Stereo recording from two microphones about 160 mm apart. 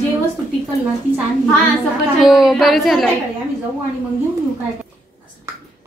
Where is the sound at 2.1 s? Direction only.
Centre (ahead or behind).